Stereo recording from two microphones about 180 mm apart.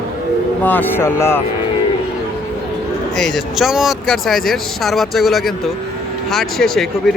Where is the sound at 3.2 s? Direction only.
Centre (ahead or behind).